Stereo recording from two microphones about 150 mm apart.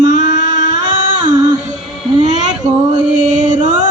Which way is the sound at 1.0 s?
55° right (ahead or behind).